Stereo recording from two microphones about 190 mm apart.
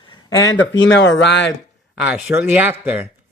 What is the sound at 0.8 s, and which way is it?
Speech, 65° left (ahead or behind).